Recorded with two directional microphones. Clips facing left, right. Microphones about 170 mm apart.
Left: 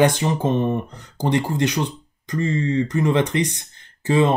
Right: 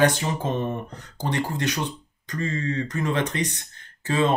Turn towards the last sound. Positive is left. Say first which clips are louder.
# left 5 dB
turn(degrees=20)  # may be behind; listen again after turning